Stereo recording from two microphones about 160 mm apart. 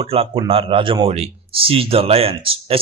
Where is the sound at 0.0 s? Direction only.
35° right (ahead or behind).